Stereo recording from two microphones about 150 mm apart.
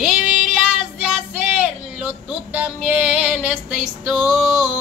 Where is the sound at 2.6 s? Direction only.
5° right (ahead or behind).